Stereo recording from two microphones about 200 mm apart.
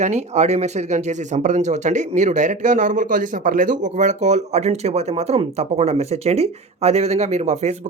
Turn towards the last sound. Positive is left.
turn(degrees=-35)  # may be behind; listen again after turning